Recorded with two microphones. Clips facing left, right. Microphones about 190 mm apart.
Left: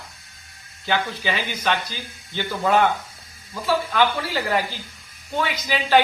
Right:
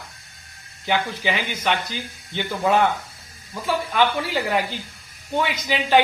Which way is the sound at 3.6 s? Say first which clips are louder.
Left 1 dB; 15° right (ahead or behind).